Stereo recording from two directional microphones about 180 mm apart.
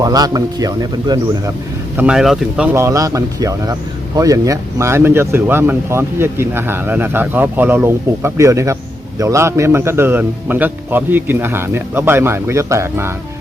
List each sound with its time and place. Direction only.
0.0 s a man's voice: 20° right (ahead or behind)
2.0 s speech: 5° right (ahead or behind)